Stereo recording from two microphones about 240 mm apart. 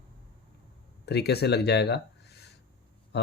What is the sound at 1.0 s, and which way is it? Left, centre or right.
Speech, left.